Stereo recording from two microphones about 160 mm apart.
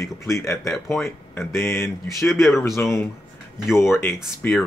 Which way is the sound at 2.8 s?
15° left (ahead or behind).